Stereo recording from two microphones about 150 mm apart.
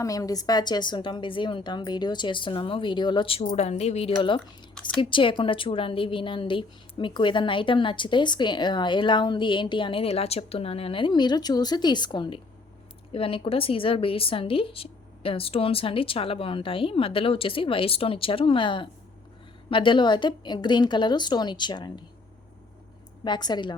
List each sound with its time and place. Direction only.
0.0 s a woman's voice: 25° left (ahead or behind)
3.4 s a woman's voice: 50° left (ahead or behind)
4.7 s a sound: 10° left (ahead or behind)
4.9 s a woman's voice: 35° left (ahead or behind)
23.2 s a woman's voice: 30° left (ahead or behind)